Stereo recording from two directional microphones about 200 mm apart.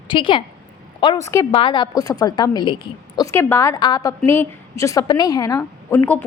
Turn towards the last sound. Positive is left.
turn(degrees=10)  # may be behind; listen again after turning